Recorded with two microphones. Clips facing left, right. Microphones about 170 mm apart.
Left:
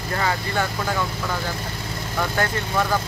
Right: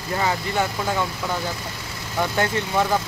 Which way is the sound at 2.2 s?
20° right (ahead or behind).